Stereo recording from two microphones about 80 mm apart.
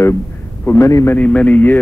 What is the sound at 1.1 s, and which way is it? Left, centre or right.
Speech, centre.